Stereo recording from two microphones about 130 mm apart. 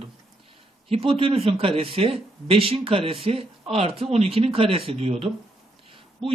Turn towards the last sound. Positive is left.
turn(degrees=-40)  # may be behind; listen again after turning